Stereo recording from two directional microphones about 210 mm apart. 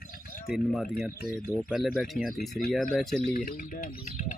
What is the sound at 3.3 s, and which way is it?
Speech, 40° left (ahead or behind).